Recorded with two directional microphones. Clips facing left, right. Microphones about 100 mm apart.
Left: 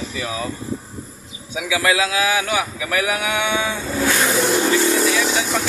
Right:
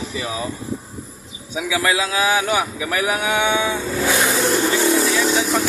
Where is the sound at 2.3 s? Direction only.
25° right (ahead or behind).